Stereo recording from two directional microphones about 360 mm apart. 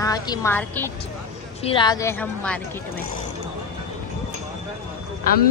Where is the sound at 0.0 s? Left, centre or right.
Centre.